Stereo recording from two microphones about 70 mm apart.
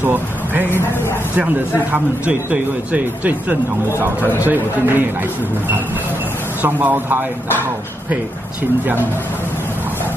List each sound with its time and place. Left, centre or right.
0.0 s speech: right
6.6 s speech: right